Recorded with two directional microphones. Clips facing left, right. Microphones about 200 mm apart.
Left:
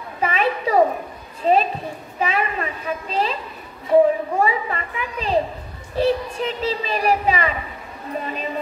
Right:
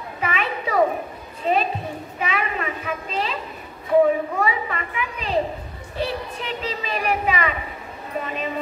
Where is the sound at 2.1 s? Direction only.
35° left (ahead or behind).